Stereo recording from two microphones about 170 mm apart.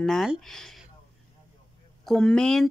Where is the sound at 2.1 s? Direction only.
5° left (ahead or behind).